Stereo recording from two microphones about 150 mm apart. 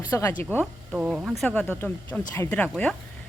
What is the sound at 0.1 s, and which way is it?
Speech, 15° left (ahead or behind).